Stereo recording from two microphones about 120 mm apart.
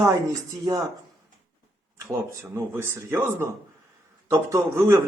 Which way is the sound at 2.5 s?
20° right (ahead or behind).